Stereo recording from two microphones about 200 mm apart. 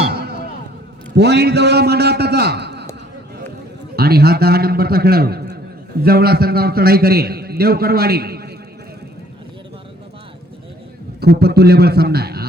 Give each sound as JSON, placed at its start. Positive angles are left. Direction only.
{"t": 0.0, "sound": "a sound", "side_deg": -55}
{"t": 1.1, "sound": "a man's voice", "side_deg": -55}
{"t": 3.9, "sound": "a man's voice", "side_deg": -50}
{"t": 11.2, "sound": "a man's voice", "side_deg": -55}